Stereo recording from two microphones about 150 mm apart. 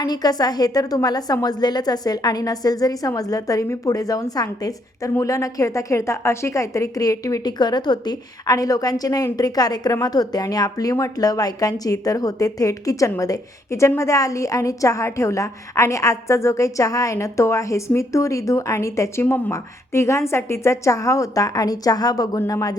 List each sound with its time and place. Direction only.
0.0 s a woman's voice: 25° left (ahead or behind)